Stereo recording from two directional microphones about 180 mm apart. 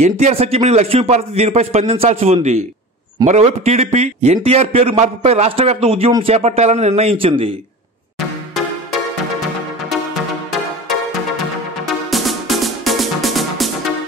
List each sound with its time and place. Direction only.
0.0 s a man's voice: 35° right (ahead or behind)
12.1 s music: centre (ahead or behind)